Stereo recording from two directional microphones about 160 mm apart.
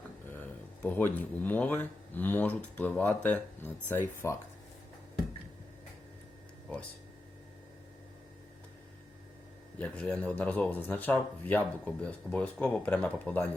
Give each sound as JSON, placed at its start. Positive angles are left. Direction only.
{"t": 0.3, "sound": "speech", "side_deg": 10}
{"t": 9.7, "sound": "speech", "side_deg": 10}